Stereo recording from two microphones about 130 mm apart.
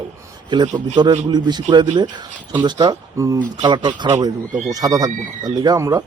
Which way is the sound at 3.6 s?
35° right (ahead or behind).